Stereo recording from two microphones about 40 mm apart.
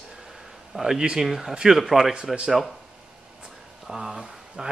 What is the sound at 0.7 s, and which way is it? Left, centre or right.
Speech, centre.